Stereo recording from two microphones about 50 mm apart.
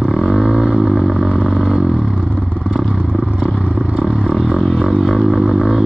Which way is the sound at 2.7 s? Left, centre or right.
Centre.